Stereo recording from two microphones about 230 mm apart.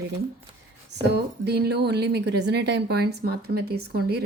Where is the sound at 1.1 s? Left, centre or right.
Right.